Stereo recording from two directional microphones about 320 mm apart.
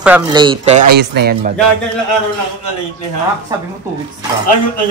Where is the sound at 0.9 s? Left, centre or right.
Right.